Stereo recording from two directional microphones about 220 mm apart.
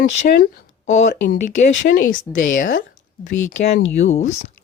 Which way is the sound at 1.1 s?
50° left (ahead or behind).